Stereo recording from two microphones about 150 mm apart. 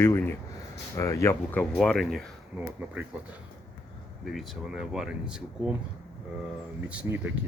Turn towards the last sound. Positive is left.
turn(degrees=-10)  # may be behind; listen again after turning